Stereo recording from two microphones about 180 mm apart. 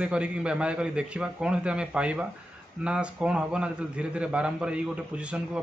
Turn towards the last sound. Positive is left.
turn(degrees=-5)  # may be behind; listen again after turning